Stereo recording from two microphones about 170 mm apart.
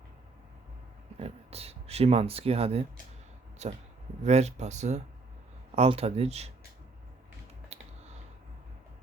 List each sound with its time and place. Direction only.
1.2 s speech: 35° right (ahead or behind)
7.7 s typing: 40° right (ahead or behind)